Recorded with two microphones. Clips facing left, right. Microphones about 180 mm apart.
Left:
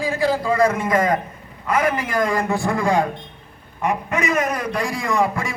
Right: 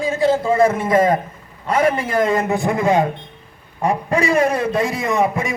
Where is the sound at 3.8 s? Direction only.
35° right (ahead or behind).